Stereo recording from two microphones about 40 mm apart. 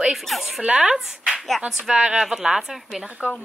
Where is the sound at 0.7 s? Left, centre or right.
Right.